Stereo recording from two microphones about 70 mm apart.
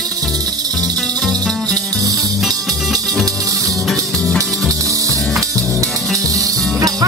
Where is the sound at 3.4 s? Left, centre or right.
Right.